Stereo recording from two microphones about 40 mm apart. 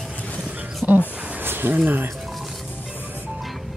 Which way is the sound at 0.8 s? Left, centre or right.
Right.